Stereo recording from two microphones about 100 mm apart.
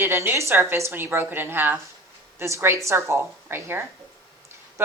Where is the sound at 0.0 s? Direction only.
20° right (ahead or behind).